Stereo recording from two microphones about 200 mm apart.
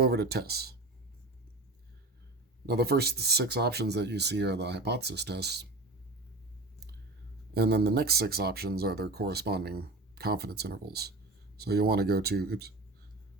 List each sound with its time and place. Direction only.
0.0 s speech: 50° right (ahead or behind)
2.6 s speech: 50° right (ahead or behind)
7.5 s speech: 55° right (ahead or behind)